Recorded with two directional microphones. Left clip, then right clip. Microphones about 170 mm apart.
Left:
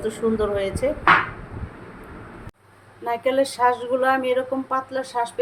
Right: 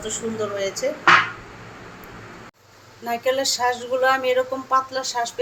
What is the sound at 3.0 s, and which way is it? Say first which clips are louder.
Speech: left 1 dB; 55° left (ahead or behind).